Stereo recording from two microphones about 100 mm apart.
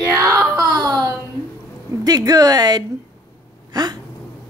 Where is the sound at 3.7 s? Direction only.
40° right (ahead or behind).